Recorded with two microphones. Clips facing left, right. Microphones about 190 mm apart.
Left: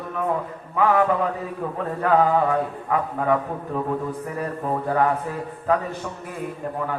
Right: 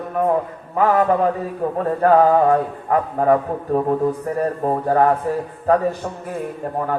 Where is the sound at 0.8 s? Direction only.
40° right (ahead or behind).